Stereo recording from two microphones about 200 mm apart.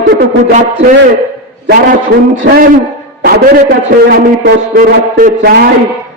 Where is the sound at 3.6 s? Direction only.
45° right (ahead or behind).